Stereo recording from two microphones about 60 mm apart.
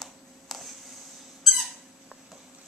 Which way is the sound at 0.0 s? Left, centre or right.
Centre.